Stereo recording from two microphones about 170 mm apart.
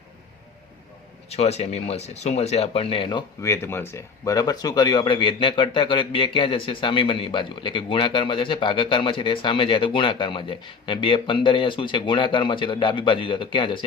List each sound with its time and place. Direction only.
1.3 s speech: 40° left (ahead or behind)